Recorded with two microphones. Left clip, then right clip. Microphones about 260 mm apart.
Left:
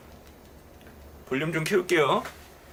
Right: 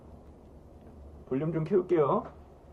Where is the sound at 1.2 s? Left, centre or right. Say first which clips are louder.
Left 4 dB; centre.